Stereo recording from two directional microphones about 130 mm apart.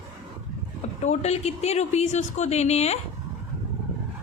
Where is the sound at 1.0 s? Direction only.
60° left (ahead or behind).